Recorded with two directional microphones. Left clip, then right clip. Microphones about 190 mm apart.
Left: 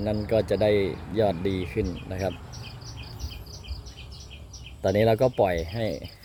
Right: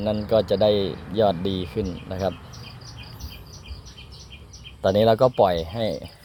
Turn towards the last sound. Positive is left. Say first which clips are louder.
# right 4 dB
turn(degrees=0)  # may be behind; listen again after turning